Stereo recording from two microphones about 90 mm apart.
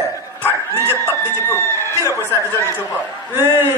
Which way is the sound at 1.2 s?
30° left (ahead or behind).